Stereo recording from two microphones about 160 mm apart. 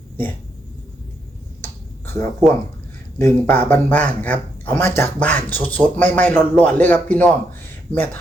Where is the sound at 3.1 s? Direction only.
15° left (ahead or behind).